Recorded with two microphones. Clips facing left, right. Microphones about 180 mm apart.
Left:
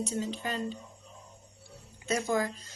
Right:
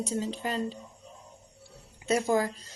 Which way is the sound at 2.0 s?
30° right (ahead or behind).